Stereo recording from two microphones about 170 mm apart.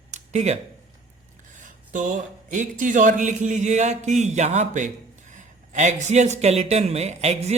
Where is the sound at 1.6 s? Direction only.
50° right (ahead or behind).